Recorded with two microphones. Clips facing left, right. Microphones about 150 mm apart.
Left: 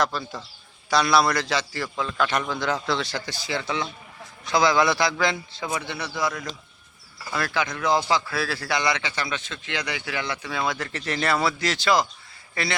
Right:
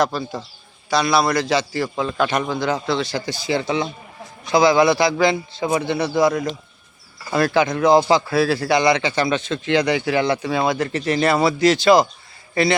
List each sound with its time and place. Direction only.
1.0 s a man's voice: 5° right (ahead or behind)
2.8 s a man's voice: centre (ahead or behind); by 3.9 s 20° right (ahead or behind)
4.4 s a man's voice: 10° right (ahead or behind)
7.7 s a man's voice: 35° right (ahead or behind)
8.1 s a man's voice: 20° right (ahead or behind)
10.7 s a man's voice: 15° right (ahead or behind)